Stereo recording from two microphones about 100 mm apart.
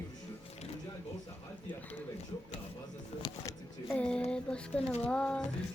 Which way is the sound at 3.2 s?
40° left (ahead or behind).